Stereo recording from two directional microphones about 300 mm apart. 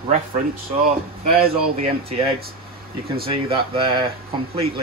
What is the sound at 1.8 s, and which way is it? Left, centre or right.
Speech, right.